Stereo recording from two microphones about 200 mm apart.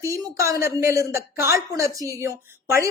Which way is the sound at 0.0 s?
15° right (ahead or behind).